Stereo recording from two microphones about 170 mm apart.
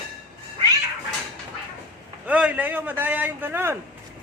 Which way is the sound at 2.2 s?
10° right (ahead or behind).